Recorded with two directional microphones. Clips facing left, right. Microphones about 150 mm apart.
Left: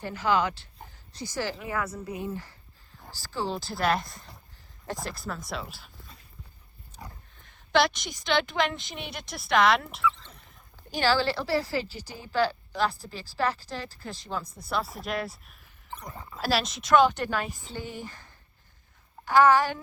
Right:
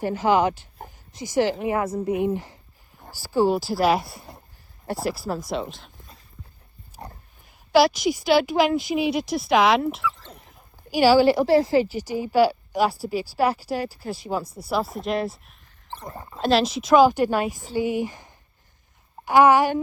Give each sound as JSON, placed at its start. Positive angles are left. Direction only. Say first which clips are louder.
{"t": 0.0, "sound": "a woman's voice", "louder": "right 6 dB", "side_deg": -15}
{"t": 3.0, "sound": "a sound", "louder": "right 4 dB", "side_deg": -10}
{"t": 3.5, "sound": "a woman's voice", "louder": "right 7 dB", "side_deg": -5}
{"t": 5.6, "sound": "a woman's voice", "louder": "right 8 dB", "side_deg": 5}
{"t": 7.7, "sound": "a woman's voice", "louder": "right 7 dB", "side_deg": -5}
{"t": 11.0, "sound": "a woman's voice", "louder": "right 9 dB", "side_deg": -10}
{"t": 16.0, "sound": "speech", "louder": "right 7 dB", "side_deg": -25}
{"t": 16.5, "sound": "a woman's voice", "louder": "right 5 dB", "side_deg": 0}
{"t": 17.2, "sound": "a woman's voice", "louder": "right 8 dB", "side_deg": -45}
{"t": 17.7, "sound": "a woman's voice", "louder": "right 13 dB", "side_deg": -10}